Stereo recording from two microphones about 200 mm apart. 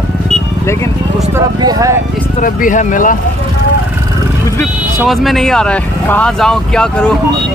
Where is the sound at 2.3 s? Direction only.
40° left (ahead or behind).